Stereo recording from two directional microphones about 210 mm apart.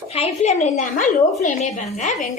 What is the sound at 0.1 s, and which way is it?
Speech, 30° left (ahead or behind).